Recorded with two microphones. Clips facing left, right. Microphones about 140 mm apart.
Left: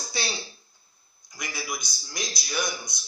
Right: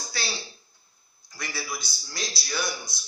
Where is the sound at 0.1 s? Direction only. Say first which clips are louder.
Left 2 dB; 20° left (ahead or behind).